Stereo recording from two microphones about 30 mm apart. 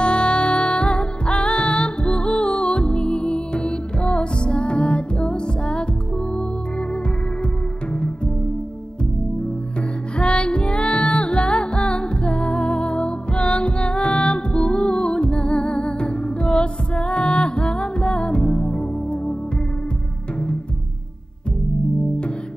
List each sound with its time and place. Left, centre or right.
0.0 s music: left
10.1 s music: left